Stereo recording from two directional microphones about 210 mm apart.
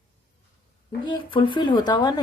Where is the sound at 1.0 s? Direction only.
25° left (ahead or behind).